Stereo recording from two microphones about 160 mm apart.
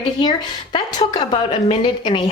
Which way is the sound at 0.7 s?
25° left (ahead or behind).